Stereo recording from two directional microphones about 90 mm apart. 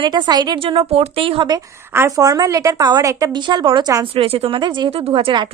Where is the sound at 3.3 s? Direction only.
60° right (ahead or behind).